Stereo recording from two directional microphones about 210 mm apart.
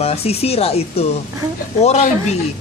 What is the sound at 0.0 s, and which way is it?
Speech, 30° left (ahead or behind).